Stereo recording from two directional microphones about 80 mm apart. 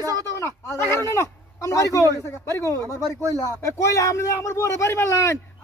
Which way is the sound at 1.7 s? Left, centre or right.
Left.